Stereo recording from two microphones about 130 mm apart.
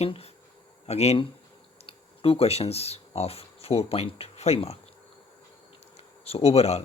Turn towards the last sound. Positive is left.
turn(degrees=55)  # may be behind; listen again after turning